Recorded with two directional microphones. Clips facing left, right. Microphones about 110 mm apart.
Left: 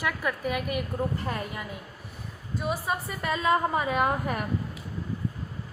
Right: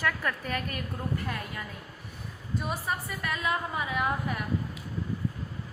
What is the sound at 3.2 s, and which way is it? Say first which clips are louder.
A woman's voice: left 7 dB; 30° left (ahead or behind).